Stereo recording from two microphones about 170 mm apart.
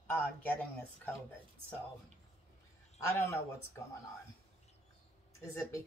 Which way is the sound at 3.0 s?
15° left (ahead or behind).